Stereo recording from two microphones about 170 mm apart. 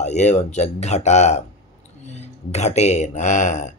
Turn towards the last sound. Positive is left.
turn(degrees=45)  # may be behind; listen again after turning